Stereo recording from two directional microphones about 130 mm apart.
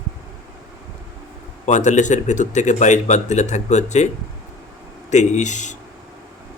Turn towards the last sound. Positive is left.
turn(degrees=70)  # may be behind; listen again after turning